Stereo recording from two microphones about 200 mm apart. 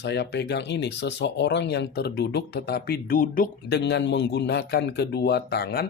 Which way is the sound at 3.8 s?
60° left (ahead or behind).